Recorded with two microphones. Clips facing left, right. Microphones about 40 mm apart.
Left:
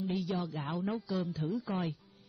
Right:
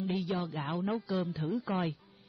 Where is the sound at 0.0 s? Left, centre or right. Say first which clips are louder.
Right 1 dB; right.